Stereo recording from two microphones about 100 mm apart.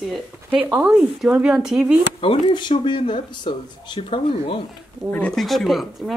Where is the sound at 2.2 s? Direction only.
60° left (ahead or behind).